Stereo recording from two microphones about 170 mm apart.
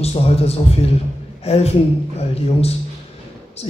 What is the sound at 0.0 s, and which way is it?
A man's voice, 35° left (ahead or behind).